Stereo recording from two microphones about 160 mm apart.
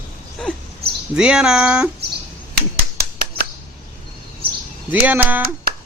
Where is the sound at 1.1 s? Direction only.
5° right (ahead or behind).